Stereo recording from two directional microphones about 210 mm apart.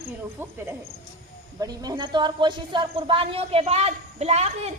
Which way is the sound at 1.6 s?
20° right (ahead or behind).